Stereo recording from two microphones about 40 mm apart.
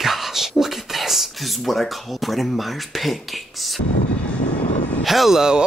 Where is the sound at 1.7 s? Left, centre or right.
Centre.